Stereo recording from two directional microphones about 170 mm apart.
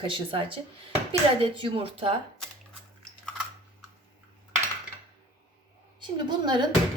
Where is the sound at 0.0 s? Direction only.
30° right (ahead or behind).